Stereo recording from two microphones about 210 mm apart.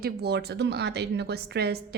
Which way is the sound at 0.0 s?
50° right (ahead or behind).